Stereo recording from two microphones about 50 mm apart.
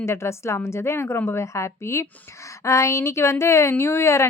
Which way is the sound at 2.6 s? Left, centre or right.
Left.